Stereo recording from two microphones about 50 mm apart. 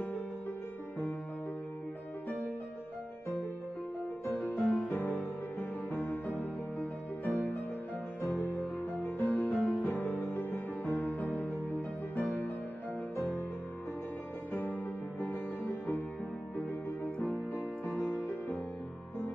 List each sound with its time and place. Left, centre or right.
4.3 s music: left
13.1 s music: left
14.5 s music: left
17.6 s music: left